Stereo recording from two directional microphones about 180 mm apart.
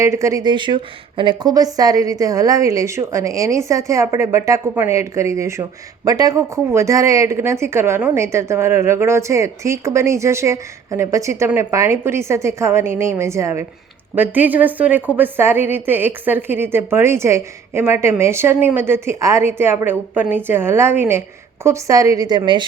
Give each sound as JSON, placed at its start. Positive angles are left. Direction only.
{"t": 0.0, "sound": "a woman's voice", "side_deg": -15}